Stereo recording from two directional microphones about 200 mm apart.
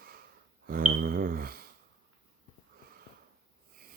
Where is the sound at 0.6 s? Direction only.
45° right (ahead or behind).